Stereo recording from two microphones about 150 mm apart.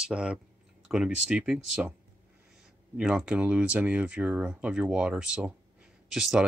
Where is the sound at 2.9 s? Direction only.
5° right (ahead or behind).